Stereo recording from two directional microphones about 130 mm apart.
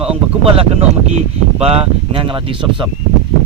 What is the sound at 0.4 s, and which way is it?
Speech, 45° right (ahead or behind).